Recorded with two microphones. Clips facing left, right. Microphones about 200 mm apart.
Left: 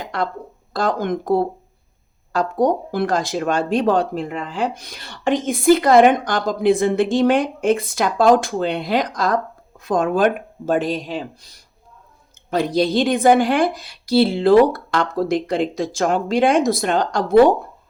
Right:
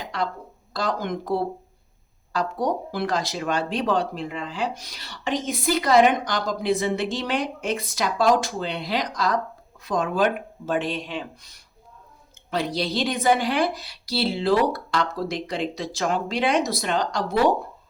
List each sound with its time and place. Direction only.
0.0 s speech: 55° left (ahead or behind); by 11.3 s 35° left (ahead or behind)
12.5 s speech: 50° left (ahead or behind)